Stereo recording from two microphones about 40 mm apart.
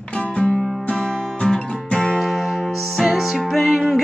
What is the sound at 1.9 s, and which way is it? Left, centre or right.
Music, left.